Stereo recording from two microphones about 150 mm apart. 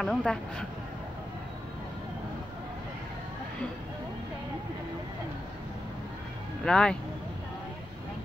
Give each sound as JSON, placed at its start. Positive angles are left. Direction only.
{"t": 0.0, "sound": "speech", "side_deg": 5}
{"t": 6.6, "sound": "speech", "side_deg": 5}